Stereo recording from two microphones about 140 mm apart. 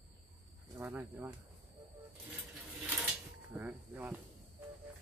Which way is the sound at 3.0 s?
10° right (ahead or behind).